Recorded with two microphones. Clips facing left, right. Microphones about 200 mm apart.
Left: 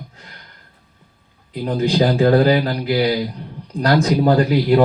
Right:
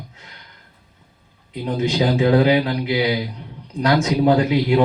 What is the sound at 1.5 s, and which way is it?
Speech, 35° left (ahead or behind).